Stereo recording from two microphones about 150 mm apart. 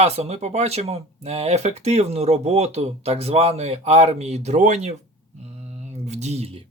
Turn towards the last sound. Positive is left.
turn(degrees=-40)  # may be behind; listen again after turning